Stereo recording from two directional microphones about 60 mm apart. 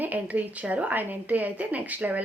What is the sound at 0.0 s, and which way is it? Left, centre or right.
A woman's voice, right.